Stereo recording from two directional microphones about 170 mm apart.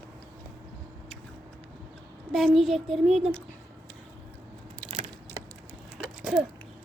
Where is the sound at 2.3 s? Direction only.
Centre (ahead or behind).